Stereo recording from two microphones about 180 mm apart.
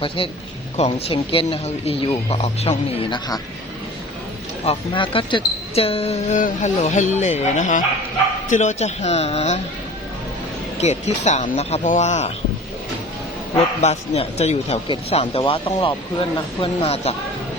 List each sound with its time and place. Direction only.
0.2 s speech: 30° left (ahead or behind)
4.6 s speech: 30° left (ahead or behind)
10.8 s speech: 40° left (ahead or behind)
13.8 s speech: 40° left (ahead or behind)